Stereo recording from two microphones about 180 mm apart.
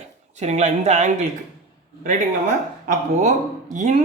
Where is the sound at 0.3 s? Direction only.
40° right (ahead or behind).